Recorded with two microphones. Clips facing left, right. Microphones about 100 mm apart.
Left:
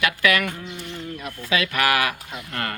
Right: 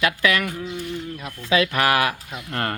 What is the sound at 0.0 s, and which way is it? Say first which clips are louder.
Speech: even; 30° right (ahead or behind).